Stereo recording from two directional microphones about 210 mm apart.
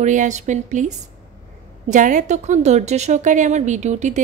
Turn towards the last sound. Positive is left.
turn(degrees=-35)  # may be behind; listen again after turning